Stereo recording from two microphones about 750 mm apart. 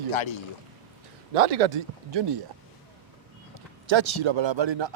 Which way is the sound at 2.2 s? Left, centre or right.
Right.